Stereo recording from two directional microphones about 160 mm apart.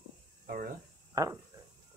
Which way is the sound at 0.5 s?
55° right (ahead or behind).